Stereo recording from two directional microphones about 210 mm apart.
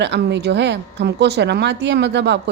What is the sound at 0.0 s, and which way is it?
Speech, 55° right (ahead or behind).